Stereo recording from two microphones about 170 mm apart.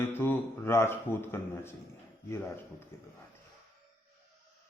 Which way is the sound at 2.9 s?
15° left (ahead or behind).